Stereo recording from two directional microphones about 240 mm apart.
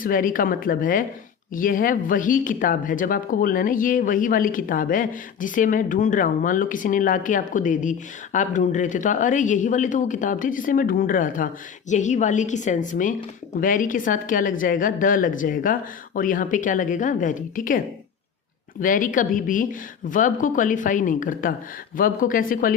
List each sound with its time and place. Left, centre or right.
0.0 s speech: left